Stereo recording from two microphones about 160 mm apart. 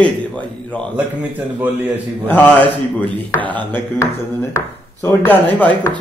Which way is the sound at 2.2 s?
10° left (ahead or behind).